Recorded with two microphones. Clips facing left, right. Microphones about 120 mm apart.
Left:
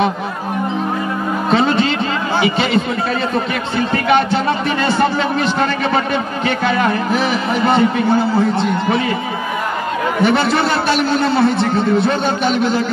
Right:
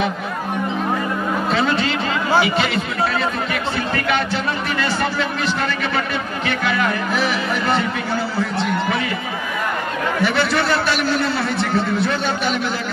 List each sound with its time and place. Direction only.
1.5 s a sound: 25° left (ahead or behind)
2.4 s a man's voice: 25° left (ahead or behind)
3.9 s music: 20° left (ahead or behind)
5.4 s a man's voice: 25° left (ahead or behind)
10.2 s a man's voice: 25° left (ahead or behind)